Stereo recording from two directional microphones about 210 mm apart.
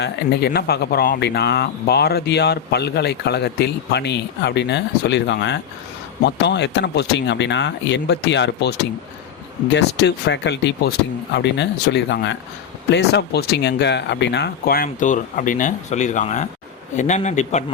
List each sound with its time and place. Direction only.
0.0 s a man's voice: 50° left (ahead or behind); by 17.6 s 35° left (ahead or behind)